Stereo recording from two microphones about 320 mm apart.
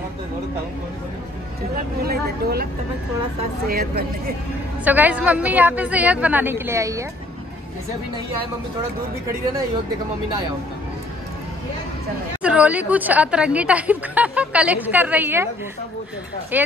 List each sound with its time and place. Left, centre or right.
2.0 s speech: right
4.8 s speech: centre
12.4 s speech: centre
16.5 s speech: centre